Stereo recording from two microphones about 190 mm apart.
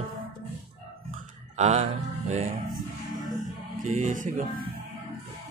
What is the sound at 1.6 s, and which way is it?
Speech, 35° right (ahead or behind).